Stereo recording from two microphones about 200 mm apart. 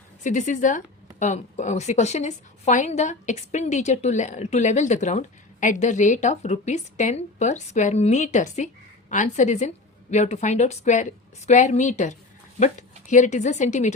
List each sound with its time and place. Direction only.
0.2 s a woman's voice: 40° left (ahead or behind)